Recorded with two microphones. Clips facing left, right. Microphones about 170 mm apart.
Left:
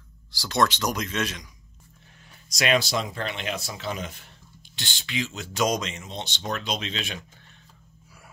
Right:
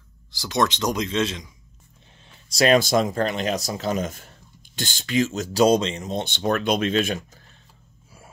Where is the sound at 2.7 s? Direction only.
50° right (ahead or behind); by 6.1 s 30° right (ahead or behind).